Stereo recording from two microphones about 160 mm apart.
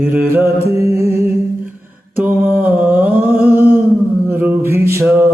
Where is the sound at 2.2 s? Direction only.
10° right (ahead or behind).